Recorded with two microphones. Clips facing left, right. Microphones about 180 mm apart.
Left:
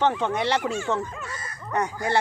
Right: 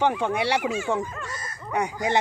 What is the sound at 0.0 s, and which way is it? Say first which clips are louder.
Speech: even; 10° right (ahead or behind).